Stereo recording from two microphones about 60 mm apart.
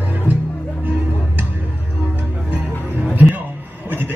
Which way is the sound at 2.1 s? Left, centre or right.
Right.